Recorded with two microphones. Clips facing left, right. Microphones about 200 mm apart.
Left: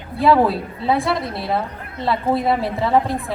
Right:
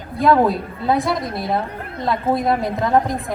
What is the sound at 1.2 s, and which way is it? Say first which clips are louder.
Speech: right 1 dB; 30° left (ahead or behind).